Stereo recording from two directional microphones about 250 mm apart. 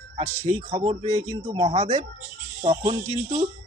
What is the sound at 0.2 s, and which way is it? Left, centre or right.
Speech, right.